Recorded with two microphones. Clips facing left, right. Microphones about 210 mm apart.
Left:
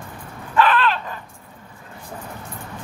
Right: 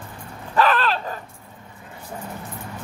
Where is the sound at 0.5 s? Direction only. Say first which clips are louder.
Left 1 dB; 40° right (ahead or behind).